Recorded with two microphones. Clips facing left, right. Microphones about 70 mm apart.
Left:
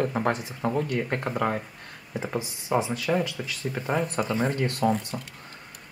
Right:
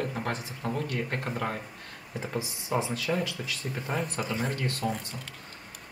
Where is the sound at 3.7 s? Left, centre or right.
Centre.